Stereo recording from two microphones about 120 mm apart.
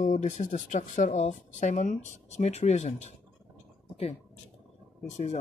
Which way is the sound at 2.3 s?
70° left (ahead or behind).